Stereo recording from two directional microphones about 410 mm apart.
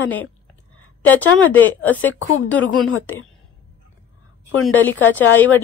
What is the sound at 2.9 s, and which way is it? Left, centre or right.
Speech, left.